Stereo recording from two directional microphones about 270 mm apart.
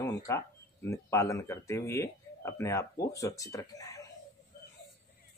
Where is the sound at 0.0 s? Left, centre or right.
Centre.